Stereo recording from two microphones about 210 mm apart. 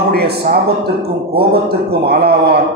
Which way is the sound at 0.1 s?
50° right (ahead or behind).